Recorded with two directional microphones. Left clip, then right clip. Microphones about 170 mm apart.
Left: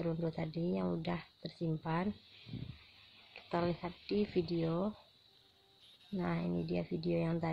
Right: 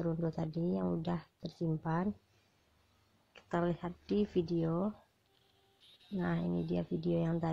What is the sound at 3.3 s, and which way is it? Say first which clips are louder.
Speech: right 1 dB; 25° right (ahead or behind).